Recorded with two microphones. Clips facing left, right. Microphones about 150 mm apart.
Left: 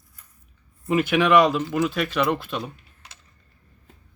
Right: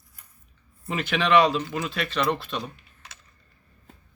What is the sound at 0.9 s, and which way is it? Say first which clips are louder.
Speech: left 4 dB; 10° left (ahead or behind).